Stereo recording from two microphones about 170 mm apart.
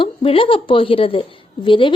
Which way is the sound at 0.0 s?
30° left (ahead or behind).